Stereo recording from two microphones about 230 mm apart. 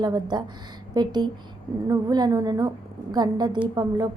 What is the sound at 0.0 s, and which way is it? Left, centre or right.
A woman's voice, centre.